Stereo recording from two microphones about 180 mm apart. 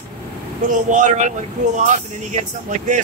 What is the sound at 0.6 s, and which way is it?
Speech, 45° right (ahead or behind).